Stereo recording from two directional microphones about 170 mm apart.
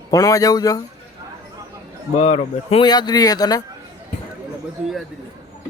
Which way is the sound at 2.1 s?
40° left (ahead or behind).